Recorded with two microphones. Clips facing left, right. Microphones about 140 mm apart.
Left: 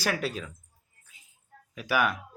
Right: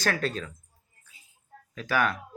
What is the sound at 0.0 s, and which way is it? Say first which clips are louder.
Speech: right 1 dB; 10° left (ahead or behind).